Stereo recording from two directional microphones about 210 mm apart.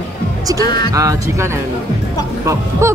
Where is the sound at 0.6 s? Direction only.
20° left (ahead or behind).